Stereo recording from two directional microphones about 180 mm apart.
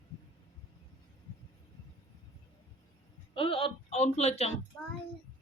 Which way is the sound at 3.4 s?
30° left (ahead or behind).